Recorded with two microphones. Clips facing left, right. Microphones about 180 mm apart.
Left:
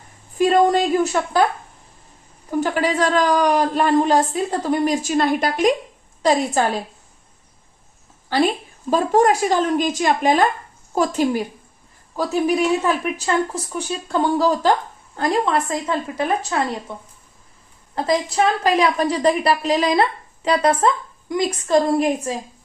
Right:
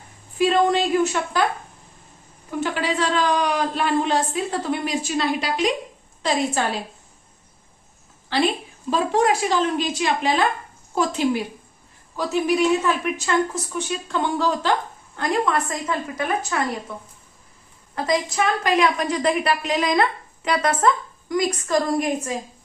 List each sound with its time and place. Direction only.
0.3 s a sound: 45° left (ahead or behind)
2.5 s a woman's voice: 45° left (ahead or behind)
8.9 s a woman's voice: 45° left (ahead or behind)
17.9 s a woman's voice: 30° left (ahead or behind)